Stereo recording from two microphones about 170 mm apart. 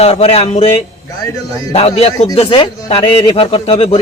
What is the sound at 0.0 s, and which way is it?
Speech, 40° left (ahead or behind).